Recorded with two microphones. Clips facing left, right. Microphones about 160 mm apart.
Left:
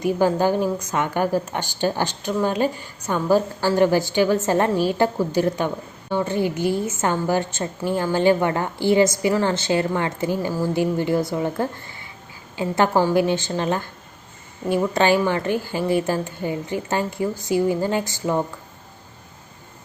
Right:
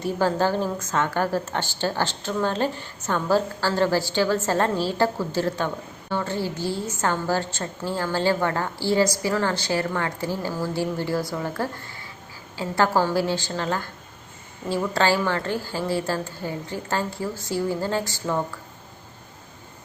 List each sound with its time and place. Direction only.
0.0 s a woman's voice: 15° left (ahead or behind)